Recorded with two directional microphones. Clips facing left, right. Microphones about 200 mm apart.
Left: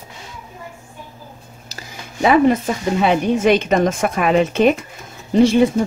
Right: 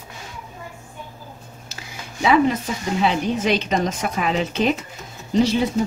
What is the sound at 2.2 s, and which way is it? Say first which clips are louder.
A woman's voice: left 4 dB; 50° left (ahead or behind).